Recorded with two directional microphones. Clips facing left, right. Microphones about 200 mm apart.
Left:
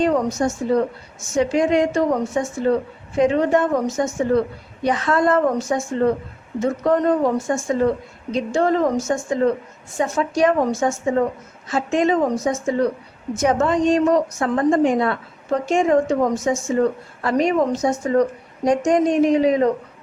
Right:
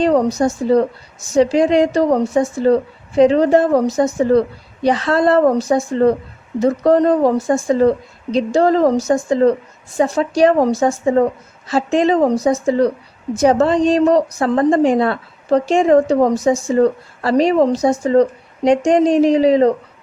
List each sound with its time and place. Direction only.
0.0 s a woman's voice: 35° right (ahead or behind)